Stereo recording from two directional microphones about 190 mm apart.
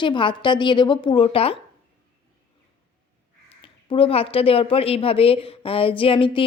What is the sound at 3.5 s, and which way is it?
Speech, 30° left (ahead or behind).